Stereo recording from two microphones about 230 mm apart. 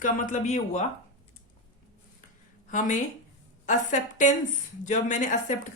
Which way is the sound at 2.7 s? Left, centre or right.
Left.